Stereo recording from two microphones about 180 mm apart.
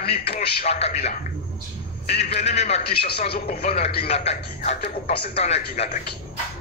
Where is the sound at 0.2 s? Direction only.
60° left (ahead or behind).